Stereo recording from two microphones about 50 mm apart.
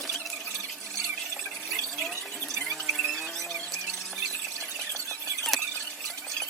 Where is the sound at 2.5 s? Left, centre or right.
Centre.